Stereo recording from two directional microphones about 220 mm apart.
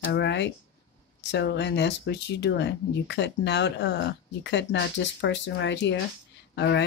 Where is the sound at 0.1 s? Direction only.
50° left (ahead or behind).